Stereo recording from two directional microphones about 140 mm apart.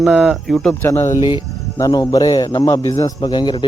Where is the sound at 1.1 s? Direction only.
35° left (ahead or behind).